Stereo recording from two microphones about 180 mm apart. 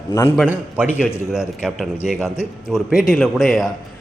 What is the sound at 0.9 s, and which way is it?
Speech, 10° left (ahead or behind).